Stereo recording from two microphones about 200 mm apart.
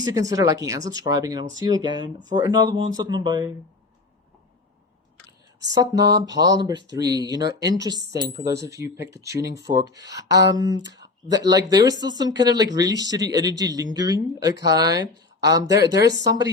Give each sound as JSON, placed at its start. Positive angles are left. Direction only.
{"t": 0.0, "sound": "speech", "side_deg": -20}
{"t": 5.5, "sound": "a sound", "side_deg": -60}
{"t": 6.4, "sound": "speech", "side_deg": -20}